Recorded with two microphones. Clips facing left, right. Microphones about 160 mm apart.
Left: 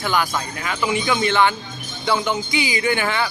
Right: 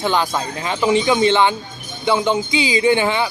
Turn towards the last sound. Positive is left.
turn(degrees=-20)  # may be behind; listen again after turning